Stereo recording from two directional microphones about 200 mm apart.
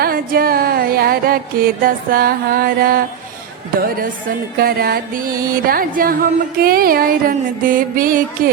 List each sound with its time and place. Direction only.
0.0 s music: 45° right (ahead or behind)